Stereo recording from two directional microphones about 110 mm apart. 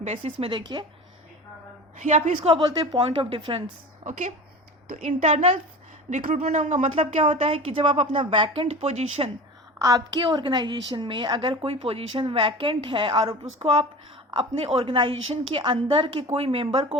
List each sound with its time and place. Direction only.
0.2 s speech: 55° right (ahead or behind)
0.6 s a woman's voice: 40° right (ahead or behind)
2.0 s speech: 90° right
2.6 s a woman's voice: 40° right (ahead or behind)
3.0 s speech: 55° right (ahead or behind)
4.9 s speech: 90° right; by 8.2 s 70° right (ahead or behind)
8.2 s a woman's voice: 50° right (ahead or behind)
8.6 s speech: 90° right
9.7 s a woman's voice: 30° right (ahead or behind); by 14.9 s 65° right (ahead or behind)
14.9 s a woman's voice: 55° right (ahead or behind)